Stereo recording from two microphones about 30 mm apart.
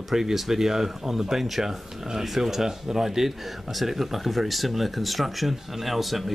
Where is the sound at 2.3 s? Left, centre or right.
Centre.